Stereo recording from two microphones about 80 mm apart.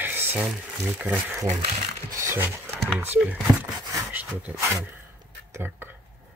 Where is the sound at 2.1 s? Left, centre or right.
Right.